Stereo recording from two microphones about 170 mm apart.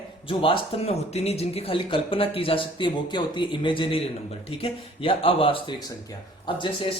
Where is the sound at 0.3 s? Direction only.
30° left (ahead or behind).